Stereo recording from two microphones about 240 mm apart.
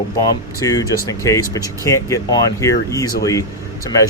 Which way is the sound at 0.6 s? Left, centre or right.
Centre.